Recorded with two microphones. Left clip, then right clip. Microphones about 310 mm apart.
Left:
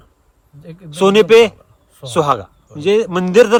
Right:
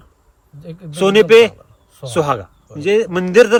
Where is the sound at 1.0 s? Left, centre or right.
Left.